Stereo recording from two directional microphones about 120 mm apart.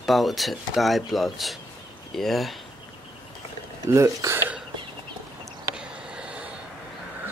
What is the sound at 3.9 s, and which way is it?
Speech, 25° right (ahead or behind).